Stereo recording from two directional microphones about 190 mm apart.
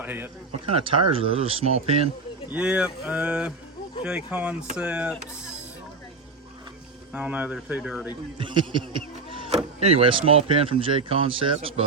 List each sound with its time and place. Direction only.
0.0 s speech: 10° right (ahead or behind)
0.6 s speech: 30° right (ahead or behind)
2.5 s speech: 5° right (ahead or behind)
7.1 s speech: 5° right (ahead or behind)
8.4 s speech: 25° right (ahead or behind)